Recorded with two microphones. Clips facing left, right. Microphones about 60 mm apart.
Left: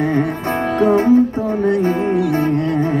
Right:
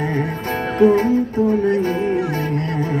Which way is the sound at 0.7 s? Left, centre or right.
Left.